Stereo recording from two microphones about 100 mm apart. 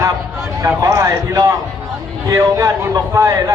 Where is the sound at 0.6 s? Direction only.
35° right (ahead or behind).